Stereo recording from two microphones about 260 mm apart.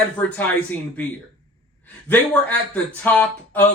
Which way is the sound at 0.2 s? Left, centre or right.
Centre.